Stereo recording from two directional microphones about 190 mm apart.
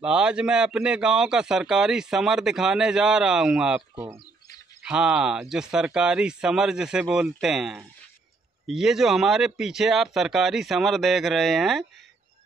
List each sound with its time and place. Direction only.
0.0 s a man's voice: 5° right (ahead or behind)
3.9 s speech: 15° right (ahead or behind)
4.8 s a man's voice: 5° right (ahead or behind)